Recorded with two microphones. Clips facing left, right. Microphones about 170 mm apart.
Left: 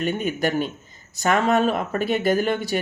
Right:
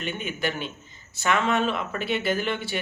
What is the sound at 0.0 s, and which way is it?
Speech, 40° left (ahead or behind).